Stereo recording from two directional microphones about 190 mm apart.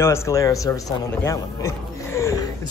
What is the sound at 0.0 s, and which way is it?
A man's voice, 15° left (ahead or behind).